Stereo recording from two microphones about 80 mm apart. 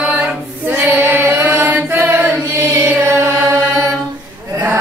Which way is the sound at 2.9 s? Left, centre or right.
Right.